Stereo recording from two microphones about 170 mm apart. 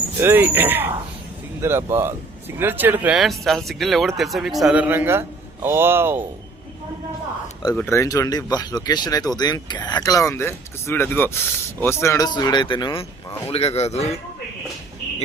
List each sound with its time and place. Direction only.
0.2 s speech: 10° right (ahead or behind)
7.8 s speech: 15° left (ahead or behind); by 14.2 s 40° left (ahead or behind)